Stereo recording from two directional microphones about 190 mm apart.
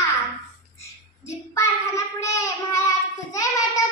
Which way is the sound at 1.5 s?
15° left (ahead or behind).